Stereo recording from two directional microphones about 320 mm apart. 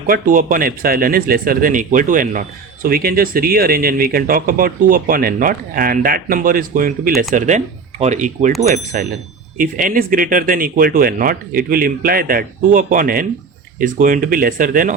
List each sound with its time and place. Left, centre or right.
0.1 s speech: right